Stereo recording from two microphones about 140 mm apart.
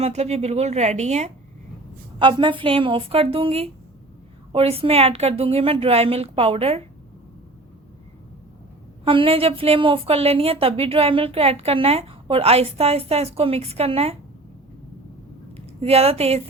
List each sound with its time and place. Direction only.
0.0 s a woman's voice: 50° right (ahead or behind)
2.1 s a woman's voice: 35° right (ahead or behind)
9.0 s a woman's voice: 40° right (ahead or behind)
15.5 s speech: 45° right (ahead or behind)